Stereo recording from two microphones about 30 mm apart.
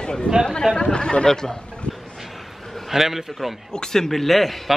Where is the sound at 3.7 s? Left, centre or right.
Centre.